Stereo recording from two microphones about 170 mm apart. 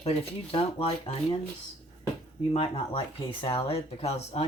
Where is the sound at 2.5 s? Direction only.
30° left (ahead or behind).